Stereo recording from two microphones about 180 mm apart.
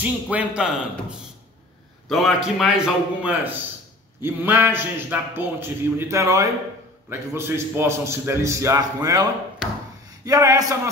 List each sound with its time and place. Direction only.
0.0 s a man's voice: 10° right (ahead or behind)
2.0 s a man's voice: centre (ahead or behind); by 9.2 s 20° right (ahead or behind)
10.2 s a man's voice: 15° right (ahead or behind)